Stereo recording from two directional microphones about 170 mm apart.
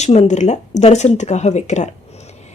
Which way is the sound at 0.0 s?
40° left (ahead or behind).